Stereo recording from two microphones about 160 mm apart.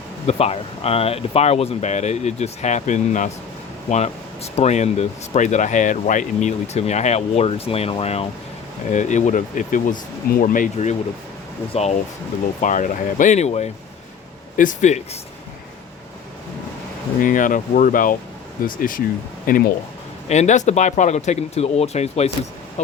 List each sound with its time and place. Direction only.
0.3 s speech: 40° left (ahead or behind)
8.9 s speech: 50° left (ahead or behind)
12.6 s speech: 55° left (ahead or behind)
14.5 s speech: 55° left (ahead or behind)
17.2 s speech: 55° left (ahead or behind)
20.2 s speech: 45° left (ahead or behind)